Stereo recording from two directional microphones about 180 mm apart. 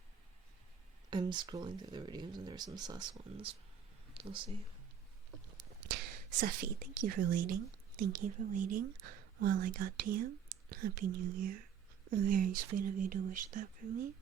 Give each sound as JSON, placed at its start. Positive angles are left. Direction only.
{"t": 1.1, "sound": "speech", "side_deg": -25}
{"t": 6.4, "sound": "speech", "side_deg": -55}